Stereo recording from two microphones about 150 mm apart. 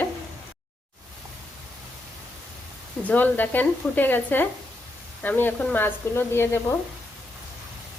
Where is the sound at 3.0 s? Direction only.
10° left (ahead or behind).